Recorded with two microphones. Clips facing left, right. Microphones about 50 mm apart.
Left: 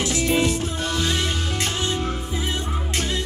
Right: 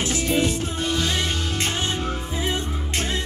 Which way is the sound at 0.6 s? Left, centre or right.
Left.